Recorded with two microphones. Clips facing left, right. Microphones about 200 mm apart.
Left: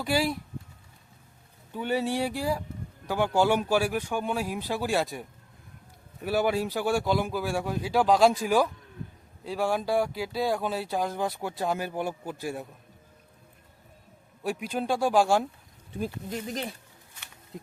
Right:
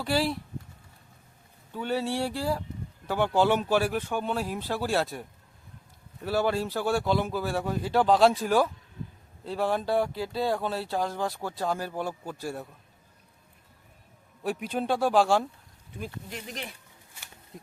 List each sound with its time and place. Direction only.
0.0 s speech: 15° left (ahead or behind)
1.7 s speech: 15° left (ahead or behind)
6.2 s speech: 15° left (ahead or behind)
14.4 s speech: 10° left (ahead or behind)
16.0 s speech: 35° left (ahead or behind)